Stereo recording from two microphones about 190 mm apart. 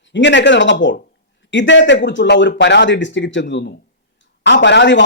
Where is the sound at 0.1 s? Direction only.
70° left (ahead or behind).